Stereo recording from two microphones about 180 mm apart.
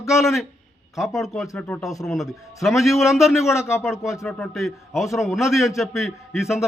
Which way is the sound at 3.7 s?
15° left (ahead or behind).